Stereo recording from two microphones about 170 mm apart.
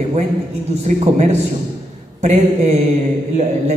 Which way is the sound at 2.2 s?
40° right (ahead or behind).